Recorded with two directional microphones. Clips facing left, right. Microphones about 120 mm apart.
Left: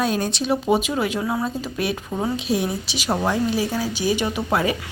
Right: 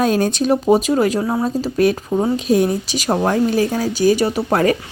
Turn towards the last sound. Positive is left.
turn(degrees=-35)  # may be behind; listen again after turning